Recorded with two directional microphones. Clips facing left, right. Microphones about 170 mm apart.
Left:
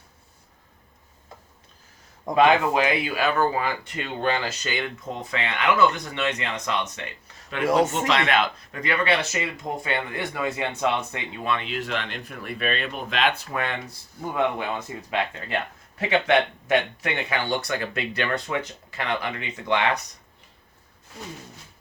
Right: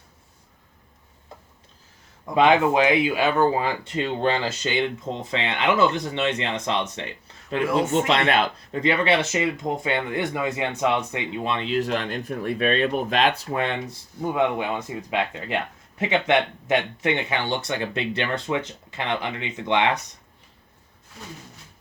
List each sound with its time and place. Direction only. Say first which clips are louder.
2.3 s speech: right 1 dB; 20° right (ahead or behind)
7.6 s speech: left 2 dB; 40° left (ahead or behind)
7.9 s speech: right 3 dB; 35° right (ahead or behind); by 11.5 s 15° right (ahead or behind)
11.5 s speech: right 5 dB; 30° right (ahead or behind)
15.1 s speech: right 1 dB; 15° right (ahead or behind)